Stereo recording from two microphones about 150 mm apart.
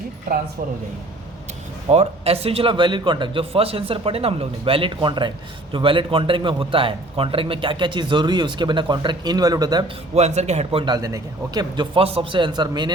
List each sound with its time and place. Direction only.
1.9 s a man's voice: 45° right (ahead or behind); by 9.8 s 25° right (ahead or behind)
10.2 s a man's voice: 50° right (ahead or behind); by 12.9 s 30° right (ahead or behind)